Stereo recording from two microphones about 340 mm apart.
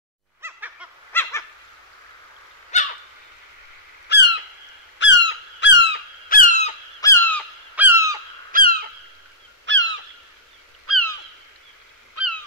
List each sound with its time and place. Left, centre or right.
0.4 s a sound: centre
1.1 s a sound: centre
2.7 s owl: centre
4.1 s squawk: left
4.9 s squeak: left
7.0 s fowl: centre
7.3 s honk: centre
8.5 s goose: right
9.7 s crow: right
10.9 s owl: right
12.2 s honk: right